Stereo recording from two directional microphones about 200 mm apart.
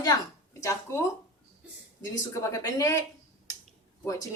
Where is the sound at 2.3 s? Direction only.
15° left (ahead or behind).